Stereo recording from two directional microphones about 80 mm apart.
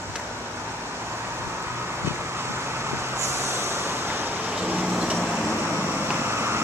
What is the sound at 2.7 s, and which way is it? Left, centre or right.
Vehicle, right.